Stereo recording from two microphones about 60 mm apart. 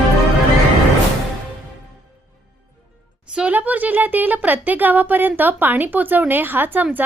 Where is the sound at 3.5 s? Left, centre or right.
Right.